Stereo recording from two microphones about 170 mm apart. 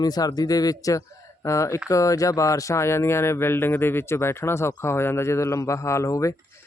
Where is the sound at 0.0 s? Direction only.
20° left (ahead or behind).